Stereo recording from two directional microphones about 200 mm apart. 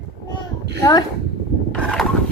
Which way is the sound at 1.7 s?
Centre (ahead or behind).